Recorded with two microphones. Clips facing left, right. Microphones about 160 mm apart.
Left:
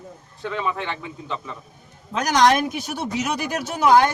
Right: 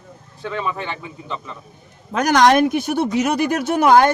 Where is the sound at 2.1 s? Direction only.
55° right (ahead or behind).